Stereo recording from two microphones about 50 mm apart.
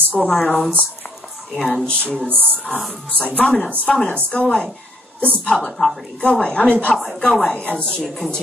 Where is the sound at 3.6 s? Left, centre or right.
Left.